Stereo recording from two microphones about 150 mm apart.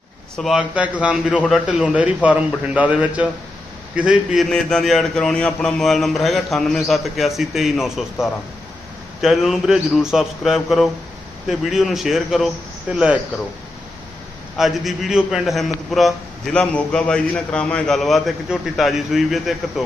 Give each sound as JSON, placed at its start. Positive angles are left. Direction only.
{"t": 0.3, "sound": "a man's voice", "side_deg": 0}
{"t": 9.2, "sound": "a man's voice", "side_deg": 0}
{"t": 14.6, "sound": "a man's voice", "side_deg": 0}